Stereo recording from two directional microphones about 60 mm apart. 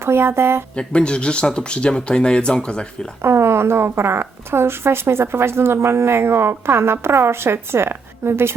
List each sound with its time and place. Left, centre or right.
0.0 s a woman's voice: right
0.8 s speech: centre
3.2 s a woman's voice: right